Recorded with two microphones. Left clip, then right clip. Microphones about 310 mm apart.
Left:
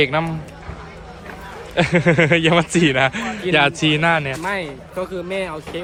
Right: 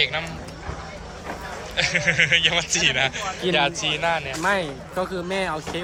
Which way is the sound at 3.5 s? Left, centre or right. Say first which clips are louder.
Left 7 dB; left.